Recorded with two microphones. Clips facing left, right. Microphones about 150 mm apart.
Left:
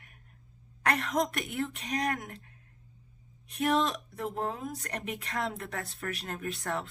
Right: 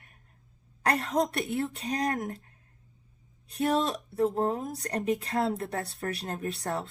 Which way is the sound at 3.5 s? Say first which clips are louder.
Right 1 dB; 35° right (ahead or behind).